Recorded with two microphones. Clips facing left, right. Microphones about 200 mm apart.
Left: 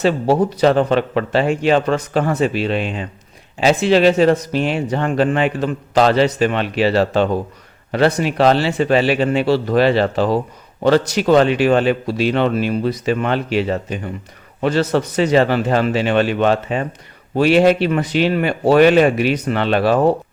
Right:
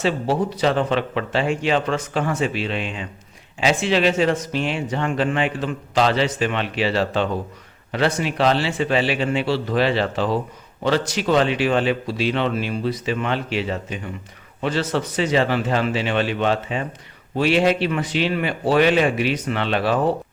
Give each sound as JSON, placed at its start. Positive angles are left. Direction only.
{"t": 0.0, "sound": "a man's voice", "side_deg": 40}